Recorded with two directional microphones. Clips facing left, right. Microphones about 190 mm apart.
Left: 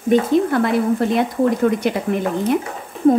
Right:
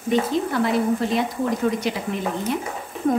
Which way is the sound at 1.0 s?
60° left (ahead or behind).